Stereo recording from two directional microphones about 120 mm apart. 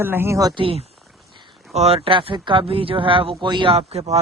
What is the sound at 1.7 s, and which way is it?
Speech, 60° right (ahead or behind).